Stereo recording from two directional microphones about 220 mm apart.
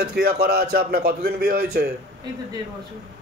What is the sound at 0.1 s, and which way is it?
A man's voice, 45° right (ahead or behind).